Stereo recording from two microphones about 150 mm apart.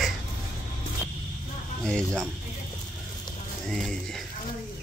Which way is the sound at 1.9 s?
5° left (ahead or behind).